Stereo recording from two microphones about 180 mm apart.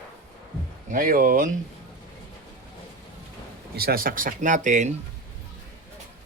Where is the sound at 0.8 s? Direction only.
50° right (ahead or behind).